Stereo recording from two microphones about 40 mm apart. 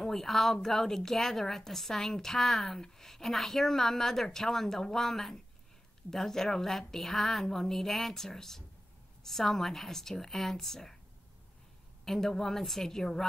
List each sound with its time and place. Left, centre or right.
0.0 s a woman's voice: centre
12.0 s a woman's voice: centre